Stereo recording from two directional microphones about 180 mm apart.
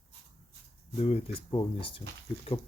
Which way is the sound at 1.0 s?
35° left (ahead or behind).